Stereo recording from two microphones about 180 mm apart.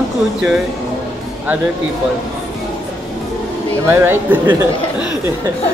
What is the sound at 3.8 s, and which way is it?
Speech, 15° right (ahead or behind).